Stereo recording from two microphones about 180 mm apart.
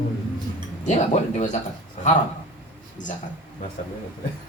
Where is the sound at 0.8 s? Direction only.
40° left (ahead or behind).